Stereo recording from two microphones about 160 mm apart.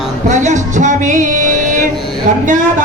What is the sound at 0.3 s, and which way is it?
Music, 50° right (ahead or behind).